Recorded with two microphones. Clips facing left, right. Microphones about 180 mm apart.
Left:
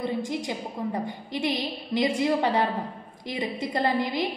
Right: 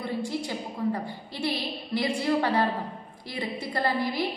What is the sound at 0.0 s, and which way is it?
A woman's voice, 20° left (ahead or behind).